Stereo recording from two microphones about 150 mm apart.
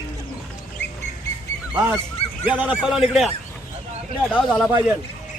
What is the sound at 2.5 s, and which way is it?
Speech, 10° right (ahead or behind).